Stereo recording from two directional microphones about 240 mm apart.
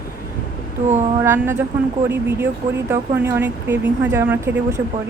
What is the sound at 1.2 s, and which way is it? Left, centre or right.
Speech, centre.